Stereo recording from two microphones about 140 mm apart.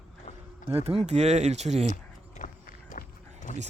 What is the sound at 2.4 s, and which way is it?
Run, 65° left (ahead or behind).